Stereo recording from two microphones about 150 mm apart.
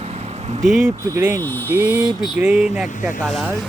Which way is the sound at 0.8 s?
15° right (ahead or behind).